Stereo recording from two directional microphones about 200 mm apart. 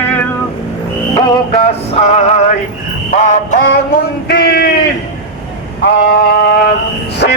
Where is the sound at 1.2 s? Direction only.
30° left (ahead or behind).